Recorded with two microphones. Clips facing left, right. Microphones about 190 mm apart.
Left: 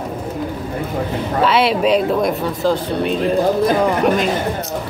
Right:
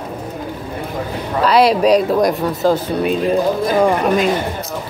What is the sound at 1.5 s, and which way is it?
Speech, 40° right (ahead or behind).